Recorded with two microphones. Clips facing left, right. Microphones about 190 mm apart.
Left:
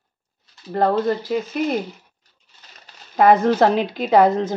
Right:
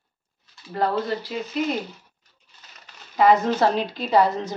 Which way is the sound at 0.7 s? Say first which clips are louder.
Left 5 dB; 50° left (ahead or behind).